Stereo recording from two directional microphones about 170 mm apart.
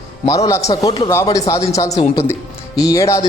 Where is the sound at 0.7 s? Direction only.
25° left (ahead or behind).